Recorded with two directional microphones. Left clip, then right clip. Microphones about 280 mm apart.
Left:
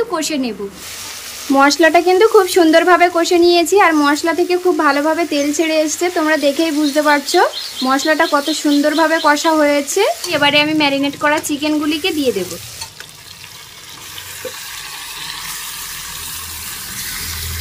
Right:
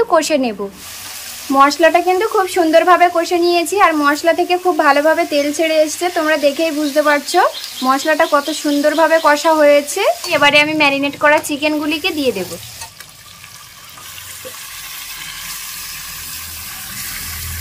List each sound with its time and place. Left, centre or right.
0.1 s speech: centre
1.5 s speech: centre